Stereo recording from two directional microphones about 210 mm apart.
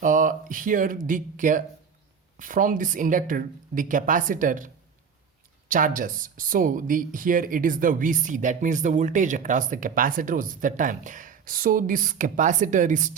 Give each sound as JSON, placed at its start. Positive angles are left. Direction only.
{"t": 0.0, "sound": "speech", "side_deg": -40}